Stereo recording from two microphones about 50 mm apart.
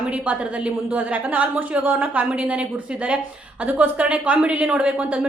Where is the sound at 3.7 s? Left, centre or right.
Right.